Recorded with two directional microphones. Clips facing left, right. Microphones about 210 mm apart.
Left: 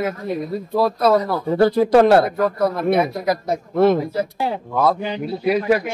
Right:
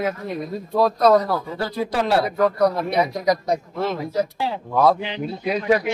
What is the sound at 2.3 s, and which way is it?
Speech, centre (ahead or behind).